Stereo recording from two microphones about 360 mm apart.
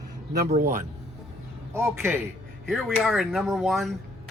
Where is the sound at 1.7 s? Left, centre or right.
Centre.